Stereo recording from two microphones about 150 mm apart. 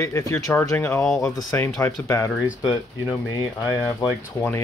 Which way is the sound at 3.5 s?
20° left (ahead or behind).